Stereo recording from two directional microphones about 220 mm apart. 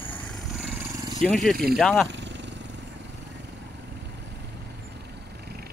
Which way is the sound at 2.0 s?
55° right (ahead or behind).